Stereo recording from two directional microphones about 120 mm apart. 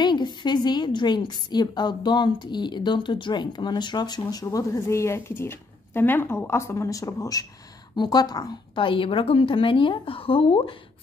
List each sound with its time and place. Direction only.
0.0 s a woman's voice: 40° left (ahead or behind)